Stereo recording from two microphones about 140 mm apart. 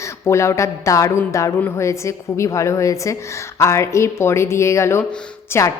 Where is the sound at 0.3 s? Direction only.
20° left (ahead or behind).